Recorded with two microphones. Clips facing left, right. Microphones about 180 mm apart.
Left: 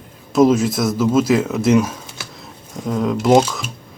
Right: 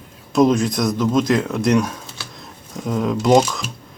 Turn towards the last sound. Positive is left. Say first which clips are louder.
# left 1 dB
turn(degrees=5)  # may be behind; listen again after turning